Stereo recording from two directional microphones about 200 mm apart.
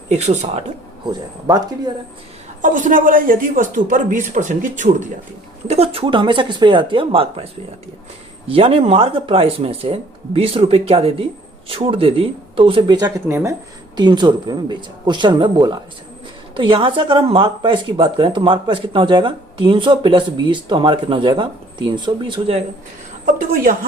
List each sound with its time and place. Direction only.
0.1 s speech: 35° right (ahead or behind)
1.0 s speech: 20° right (ahead or behind)
2.6 s speech: 40° right (ahead or behind)
23.2 s speech: 40° right (ahead or behind)